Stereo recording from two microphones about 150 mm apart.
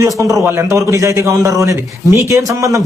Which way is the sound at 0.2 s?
20° right (ahead or behind).